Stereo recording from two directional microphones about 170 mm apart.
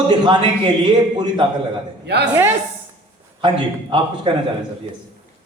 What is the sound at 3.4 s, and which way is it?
Speech, 30° right (ahead or behind).